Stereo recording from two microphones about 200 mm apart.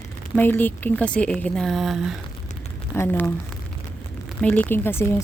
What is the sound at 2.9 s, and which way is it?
Speech, 10° left (ahead or behind).